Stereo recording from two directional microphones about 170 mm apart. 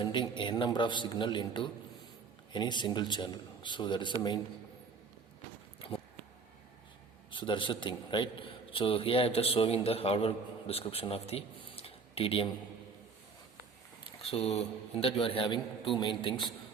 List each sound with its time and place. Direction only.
0.0 s a man's voice: 25° left (ahead or behind)
7.3 s a man's voice: 30° left (ahead or behind)
14.2 s a man's voice: 35° left (ahead or behind)